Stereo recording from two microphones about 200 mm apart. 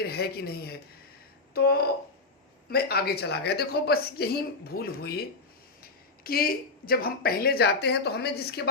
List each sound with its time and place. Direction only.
0.0 s a woman's voice: 50° left (ahead or behind)